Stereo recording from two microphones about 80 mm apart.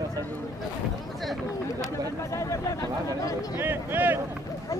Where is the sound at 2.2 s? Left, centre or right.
Left.